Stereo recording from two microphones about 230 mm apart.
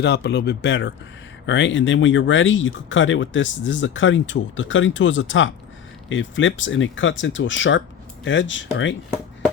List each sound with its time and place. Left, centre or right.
0.0 s speech: left